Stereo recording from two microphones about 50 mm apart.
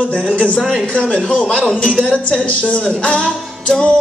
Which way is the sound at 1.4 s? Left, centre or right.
Centre.